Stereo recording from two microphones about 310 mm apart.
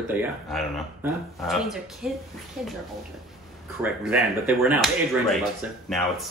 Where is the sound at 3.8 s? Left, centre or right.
Centre.